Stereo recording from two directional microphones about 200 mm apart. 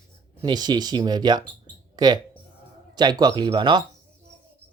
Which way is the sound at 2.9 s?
20° right (ahead or behind).